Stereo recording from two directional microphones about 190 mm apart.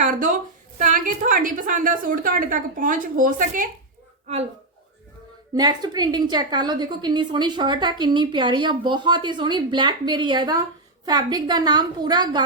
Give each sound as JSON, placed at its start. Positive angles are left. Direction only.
{"t": 0.0, "sound": "a woman's voice", "side_deg": -45}
{"t": 5.5, "sound": "a woman's voice", "side_deg": -20}